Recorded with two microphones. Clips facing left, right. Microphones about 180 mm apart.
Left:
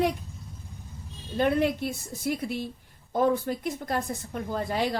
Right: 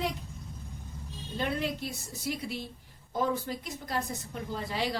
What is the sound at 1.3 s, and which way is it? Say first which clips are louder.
A woman's voice: left 8 dB; 55° left (ahead or behind).